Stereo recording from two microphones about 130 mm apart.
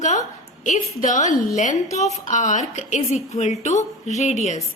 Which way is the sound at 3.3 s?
60° left (ahead or behind).